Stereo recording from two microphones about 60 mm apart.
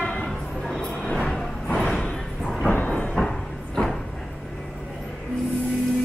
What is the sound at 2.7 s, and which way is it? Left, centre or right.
Train, left.